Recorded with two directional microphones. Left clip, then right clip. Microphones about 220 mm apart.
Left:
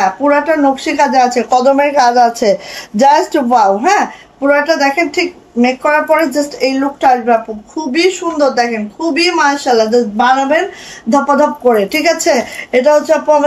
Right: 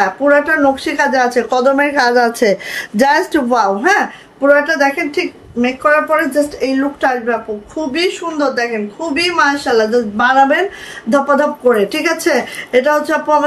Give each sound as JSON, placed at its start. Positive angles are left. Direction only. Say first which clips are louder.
{"t": 0.8, "sound": "a woman's voice", "louder": "left 3 dB", "side_deg": -25}